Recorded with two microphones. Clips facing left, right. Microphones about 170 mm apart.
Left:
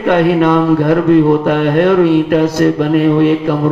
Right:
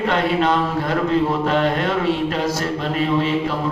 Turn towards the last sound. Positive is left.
turn(degrees=60)  # may be behind; listen again after turning